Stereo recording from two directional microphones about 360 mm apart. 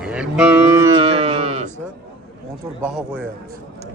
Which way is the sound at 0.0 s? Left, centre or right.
Centre.